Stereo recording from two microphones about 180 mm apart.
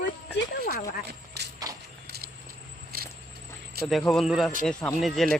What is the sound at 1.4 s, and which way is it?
Horse, 70° right (ahead or behind).